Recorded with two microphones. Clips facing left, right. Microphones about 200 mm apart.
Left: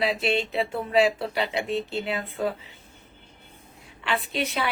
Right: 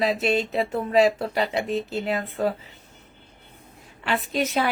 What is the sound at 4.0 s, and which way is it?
Speech, 40° right (ahead or behind).